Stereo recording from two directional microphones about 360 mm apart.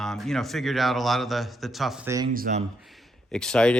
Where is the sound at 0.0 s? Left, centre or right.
Centre.